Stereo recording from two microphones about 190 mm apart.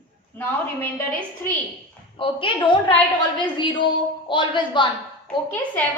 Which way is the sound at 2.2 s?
25° left (ahead or behind).